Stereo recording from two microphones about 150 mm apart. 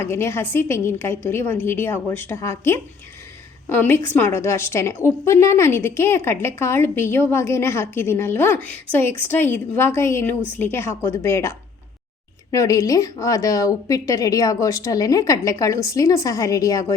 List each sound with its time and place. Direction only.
0.0 s a woman's voice: 15° left (ahead or behind)